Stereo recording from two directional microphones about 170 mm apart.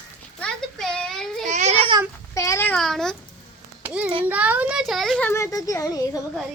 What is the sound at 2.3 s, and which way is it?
Speech, 20° left (ahead or behind).